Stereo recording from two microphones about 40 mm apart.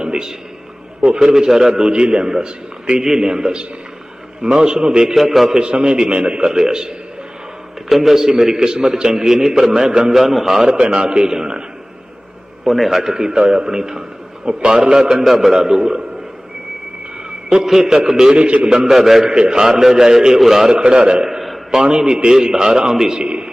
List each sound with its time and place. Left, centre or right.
0.0 s a sound: centre
1.0 s a man's voice: centre
5.1 s a man's voice: centre
5.5 s a man's voice: right
7.9 s a man's voice: centre
12.6 s a man's voice: centre; by 15.2 s right
15.2 s a man's voice: centre
17.2 s a sound: centre
17.7 s a man's voice: centre
18.3 s a man's voice: right
18.9 s a man's voice: centre
20.7 s a man's voice: right